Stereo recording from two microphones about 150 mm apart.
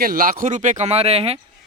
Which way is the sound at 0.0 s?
70° right (ahead or behind).